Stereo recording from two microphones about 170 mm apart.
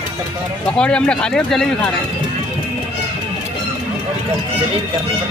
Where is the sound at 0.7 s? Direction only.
5° left (ahead or behind).